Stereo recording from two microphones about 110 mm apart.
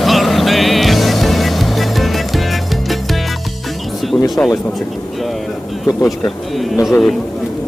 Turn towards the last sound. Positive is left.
turn(degrees=0)  # may be behind; listen again after turning